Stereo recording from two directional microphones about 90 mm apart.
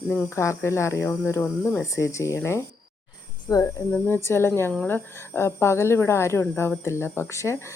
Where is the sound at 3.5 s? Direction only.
35° left (ahead or behind).